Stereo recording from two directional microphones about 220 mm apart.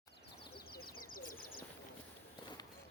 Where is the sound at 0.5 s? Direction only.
45° left (ahead or behind).